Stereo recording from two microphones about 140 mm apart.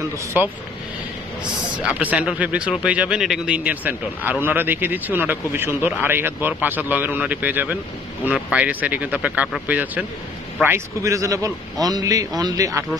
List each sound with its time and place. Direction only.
0.3 s speech: 10° right (ahead or behind)
2.0 s a man's voice: 10° right (ahead or behind); by 12.8 s 25° right (ahead or behind)